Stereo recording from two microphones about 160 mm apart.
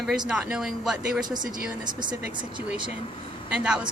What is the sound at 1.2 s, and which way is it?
Speech, 25° right (ahead or behind).